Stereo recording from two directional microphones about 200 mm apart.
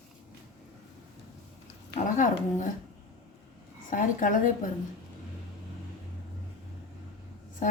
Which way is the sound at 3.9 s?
40° left (ahead or behind).